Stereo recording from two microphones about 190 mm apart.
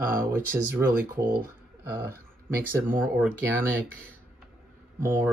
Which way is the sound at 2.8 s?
10° right (ahead or behind).